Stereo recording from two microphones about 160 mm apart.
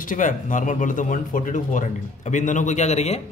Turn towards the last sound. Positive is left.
turn(degrees=45)  # may be behind; listen again after turning